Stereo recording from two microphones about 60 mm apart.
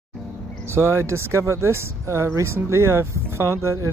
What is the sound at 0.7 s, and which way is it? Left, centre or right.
Speech, right.